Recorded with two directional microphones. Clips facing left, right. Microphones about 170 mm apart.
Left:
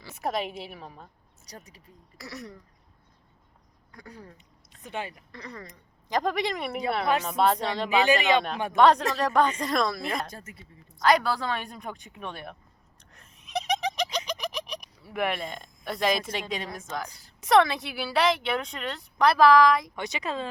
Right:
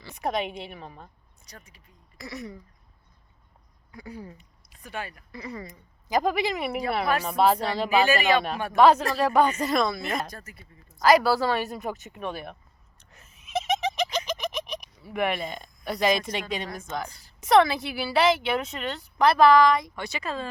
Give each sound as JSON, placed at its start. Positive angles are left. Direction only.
{"t": 0.0, "sound": "a woman's voice", "side_deg": 0}
{"t": 1.5, "sound": "speech", "side_deg": 40}
{"t": 2.1, "sound": "a woman's voice", "side_deg": 0}
{"t": 3.9, "sound": "speech", "side_deg": -10}
{"t": 4.8, "sound": "speech", "side_deg": 20}
{"t": 5.3, "sound": "a woman's voice", "side_deg": -10}
{"t": 8.0, "sound": "speech", "side_deg": 20}
{"t": 8.7, "sound": "a woman's voice", "side_deg": -5}
{"t": 10.3, "sound": "speech", "side_deg": 25}
{"t": 10.9, "sound": "a woman's voice", "side_deg": -5}
{"t": 13.0, "sound": "a sound", "side_deg": -5}
{"t": 15.0, "sound": "a woman's voice", "side_deg": 0}
{"t": 20.0, "sound": "speech", "side_deg": 20}